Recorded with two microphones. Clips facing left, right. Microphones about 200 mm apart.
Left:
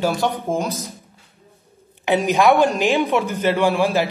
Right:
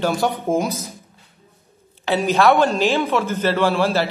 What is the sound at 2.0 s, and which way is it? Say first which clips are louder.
Speech: even; 15° left (ahead or behind).